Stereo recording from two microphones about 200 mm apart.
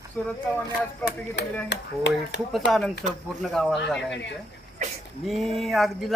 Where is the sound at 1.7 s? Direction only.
60° left (ahead or behind).